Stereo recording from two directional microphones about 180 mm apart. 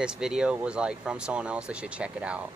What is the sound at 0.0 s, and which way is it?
Speech, 5° right (ahead or behind).